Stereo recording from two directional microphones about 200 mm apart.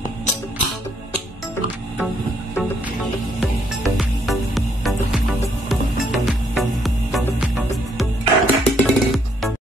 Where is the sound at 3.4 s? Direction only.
Centre (ahead or behind).